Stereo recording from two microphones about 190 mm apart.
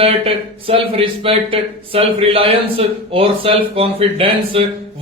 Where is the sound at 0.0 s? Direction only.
30° right (ahead or behind).